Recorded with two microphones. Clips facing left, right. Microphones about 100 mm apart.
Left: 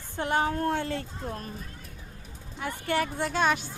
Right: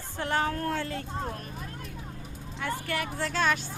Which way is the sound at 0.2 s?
20° left (ahead or behind).